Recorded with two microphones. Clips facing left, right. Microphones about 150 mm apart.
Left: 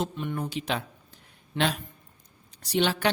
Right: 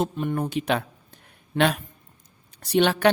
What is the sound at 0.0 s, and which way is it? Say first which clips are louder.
A man's voice: right 5 dB; 50° right (ahead or behind).